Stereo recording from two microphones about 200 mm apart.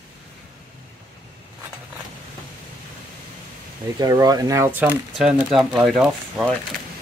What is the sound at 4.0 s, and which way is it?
Speech, 20° right (ahead or behind).